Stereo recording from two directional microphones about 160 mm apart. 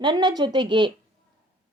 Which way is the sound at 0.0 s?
30° right (ahead or behind).